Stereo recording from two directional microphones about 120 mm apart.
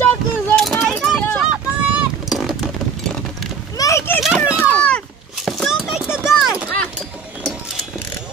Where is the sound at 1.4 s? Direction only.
5° right (ahead or behind).